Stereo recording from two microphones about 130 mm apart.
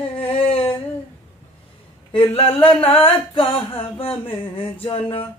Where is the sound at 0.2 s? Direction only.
45° left (ahead or behind).